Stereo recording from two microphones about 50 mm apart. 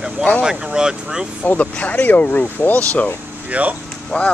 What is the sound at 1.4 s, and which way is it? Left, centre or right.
Speech, left.